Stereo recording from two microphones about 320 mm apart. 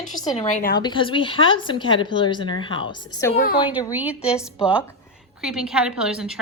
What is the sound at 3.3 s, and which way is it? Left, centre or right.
A woman's voice, left.